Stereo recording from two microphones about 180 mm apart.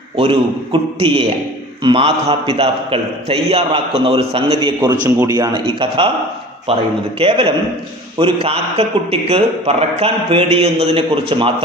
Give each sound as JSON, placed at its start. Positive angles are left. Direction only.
{"t": 0.2, "sound": "a man's voice", "side_deg": -30}
{"t": 5.0, "sound": "a man's voice", "side_deg": -20}